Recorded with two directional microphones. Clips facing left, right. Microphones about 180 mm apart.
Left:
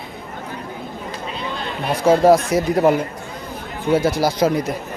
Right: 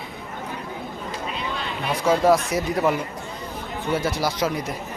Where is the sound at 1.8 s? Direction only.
40° left (ahead or behind).